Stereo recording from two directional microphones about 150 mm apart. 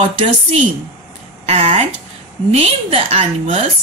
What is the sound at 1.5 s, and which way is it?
Speech, 45° right (ahead or behind).